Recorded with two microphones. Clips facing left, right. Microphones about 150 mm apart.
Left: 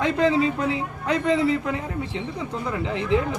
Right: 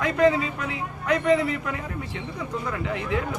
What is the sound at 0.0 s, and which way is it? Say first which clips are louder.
A man's voice: left 1 dB; 25° left (ahead or behind).